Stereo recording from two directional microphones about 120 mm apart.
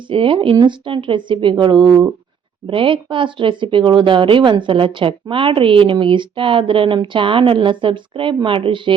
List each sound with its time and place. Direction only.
0.1 s a woman's voice: 45° right (ahead or behind)